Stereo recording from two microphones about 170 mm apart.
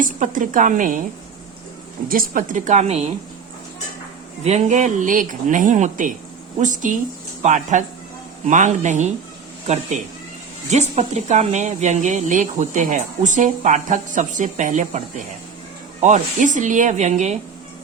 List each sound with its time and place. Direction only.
0.0 s speech: 50° right (ahead or behind)
2.0 s speech: 55° right (ahead or behind); by 3.1 s 40° right (ahead or behind)
4.4 s speech: 45° right (ahead or behind)
10.7 s speech: 40° right (ahead or behind)